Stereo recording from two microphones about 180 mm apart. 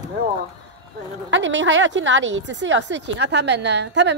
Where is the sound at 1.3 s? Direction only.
90° right.